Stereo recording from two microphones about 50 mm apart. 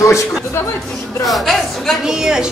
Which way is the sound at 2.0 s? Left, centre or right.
Centre.